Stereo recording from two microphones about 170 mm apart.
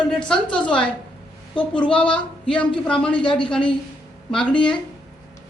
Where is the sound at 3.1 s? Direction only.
30° left (ahead or behind).